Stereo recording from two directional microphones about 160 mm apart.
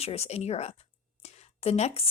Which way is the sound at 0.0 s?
40° left (ahead or behind).